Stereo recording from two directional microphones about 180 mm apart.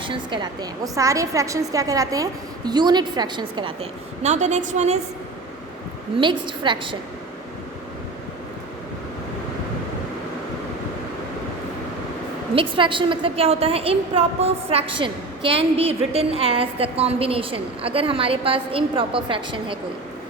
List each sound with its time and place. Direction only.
0.0 s a woman's voice: 25° right (ahead or behind)
4.2 s a woman's voice: 40° right (ahead or behind)
6.1 s a woman's voice: 25° right (ahead or behind)
12.5 s a woman's voice: 30° right (ahead or behind)